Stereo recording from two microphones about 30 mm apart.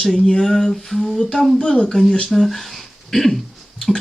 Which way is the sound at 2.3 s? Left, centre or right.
Centre.